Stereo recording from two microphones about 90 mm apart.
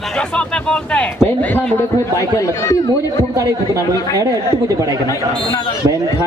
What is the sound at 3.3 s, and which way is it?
A man's voice, 35° right (ahead or behind).